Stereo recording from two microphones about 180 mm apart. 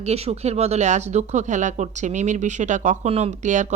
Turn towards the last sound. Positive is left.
turn(degrees=-40)  # may be behind; listen again after turning